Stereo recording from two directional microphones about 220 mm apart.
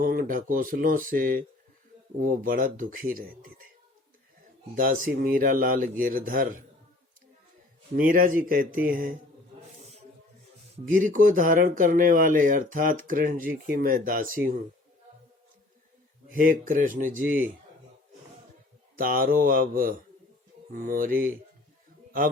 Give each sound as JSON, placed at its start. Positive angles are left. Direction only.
{"t": 0.0, "sound": "speech", "side_deg": -40}
{"t": 4.7, "sound": "speech", "side_deg": -40}
{"t": 7.9, "sound": "speech", "side_deg": -40}
{"t": 10.8, "sound": "speech", "side_deg": -35}
{"t": 16.3, "sound": "speech", "side_deg": -35}
{"t": 18.9, "sound": "speech", "side_deg": -40}